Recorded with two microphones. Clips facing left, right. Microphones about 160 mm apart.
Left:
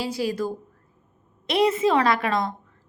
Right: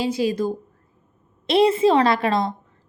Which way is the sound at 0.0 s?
20° right (ahead or behind).